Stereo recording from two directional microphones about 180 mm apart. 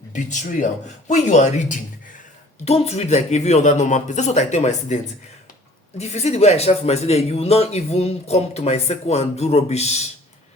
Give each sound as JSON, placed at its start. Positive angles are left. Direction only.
{"t": 0.1, "sound": "a man's voice", "side_deg": 40}
{"t": 6.0, "sound": "a man's voice", "side_deg": 35}